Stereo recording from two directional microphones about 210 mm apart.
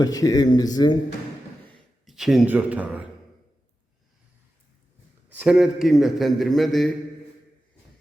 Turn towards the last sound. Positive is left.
turn(degrees=0)  # may be behind; listen again after turning